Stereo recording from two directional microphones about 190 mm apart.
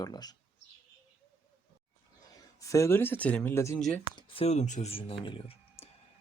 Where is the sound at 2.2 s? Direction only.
20° left (ahead or behind).